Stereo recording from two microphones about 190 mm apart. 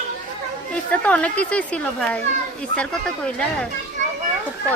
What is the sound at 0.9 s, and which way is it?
A woman's voice, 5° left (ahead or behind).